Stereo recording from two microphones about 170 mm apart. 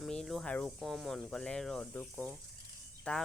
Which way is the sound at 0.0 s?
Centre (ahead or behind).